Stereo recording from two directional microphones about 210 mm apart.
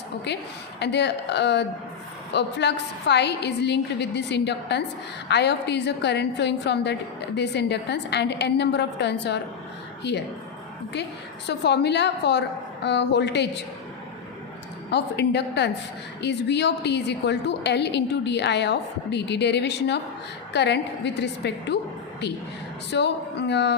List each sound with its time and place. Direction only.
0.3 s a woman's voice: 55° left (ahead or behind)
11.4 s a woman's voice: 55° left (ahead or behind)
14.8 s a woman's voice: 55° left (ahead or behind)
22.9 s a woman's voice: 55° left (ahead or behind)